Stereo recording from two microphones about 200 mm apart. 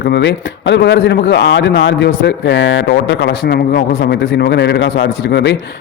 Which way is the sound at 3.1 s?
60° left (ahead or behind).